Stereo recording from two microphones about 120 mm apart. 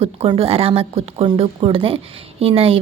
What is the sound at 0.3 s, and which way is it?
A woman's voice, 55° right (ahead or behind).